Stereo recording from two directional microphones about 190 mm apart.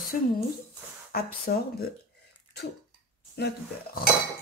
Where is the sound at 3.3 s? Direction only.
55° left (ahead or behind).